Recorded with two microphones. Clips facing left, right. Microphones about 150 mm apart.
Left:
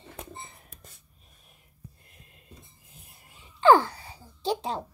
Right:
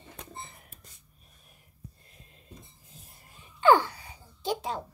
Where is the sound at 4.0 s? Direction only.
30° left (ahead or behind).